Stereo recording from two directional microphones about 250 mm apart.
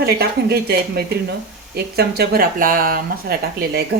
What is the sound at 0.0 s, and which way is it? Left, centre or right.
Speech, right.